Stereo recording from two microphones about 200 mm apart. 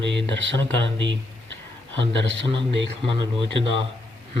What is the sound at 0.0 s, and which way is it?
Speech, 60° right (ahead or behind).